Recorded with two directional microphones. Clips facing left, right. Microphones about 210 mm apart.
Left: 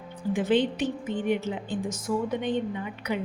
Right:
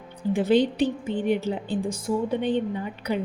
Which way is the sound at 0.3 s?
35° right (ahead or behind).